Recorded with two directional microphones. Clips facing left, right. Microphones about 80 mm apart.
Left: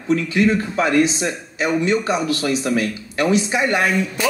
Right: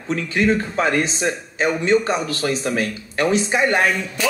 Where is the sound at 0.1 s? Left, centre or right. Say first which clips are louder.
Left 2 dB; right.